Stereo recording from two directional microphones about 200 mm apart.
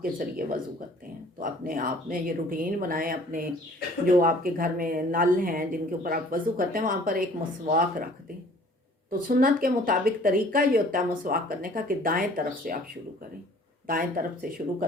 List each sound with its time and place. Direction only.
0.0 s a woman's voice: 45° right (ahead or behind)
9.0 s a woman's voice: 45° right (ahead or behind)
13.8 s a woman's voice: 45° right (ahead or behind)